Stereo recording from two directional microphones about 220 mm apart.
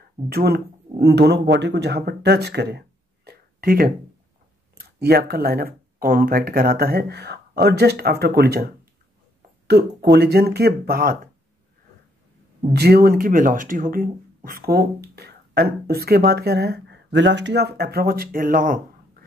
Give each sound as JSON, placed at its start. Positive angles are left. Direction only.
{"t": 0.3, "sound": "speech", "side_deg": -45}
{"t": 3.3, "sound": "a sound", "side_deg": -40}
{"t": 4.7, "sound": "speech", "side_deg": -45}
{"t": 12.7, "sound": "speech", "side_deg": -45}